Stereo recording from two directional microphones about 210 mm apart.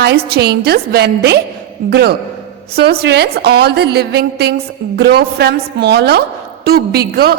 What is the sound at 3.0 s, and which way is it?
A woman's voice, 50° right (ahead or behind).